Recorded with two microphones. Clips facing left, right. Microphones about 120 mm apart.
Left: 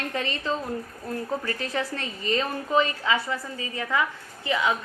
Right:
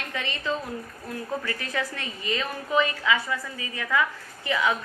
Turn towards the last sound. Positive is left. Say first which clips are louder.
# even
turn(degrees=20)  # may be behind; listen again after turning